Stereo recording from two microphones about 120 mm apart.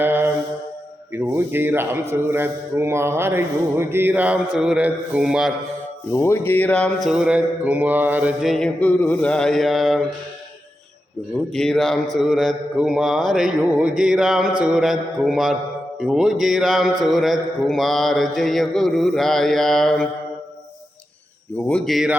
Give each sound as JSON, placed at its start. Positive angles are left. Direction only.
{"t": 0.0, "sound": "music", "side_deg": -15}
{"t": 1.1, "sound": "speech", "side_deg": -20}
{"t": 6.1, "sound": "mantra", "side_deg": 20}
{"t": 8.8, "sound": "mantra", "side_deg": 15}
{"t": 11.5, "sound": "mantra", "side_deg": 5}
{"t": 21.7, "sound": "mantra", "side_deg": 5}